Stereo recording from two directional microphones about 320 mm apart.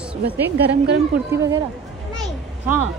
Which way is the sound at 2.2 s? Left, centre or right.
Centre.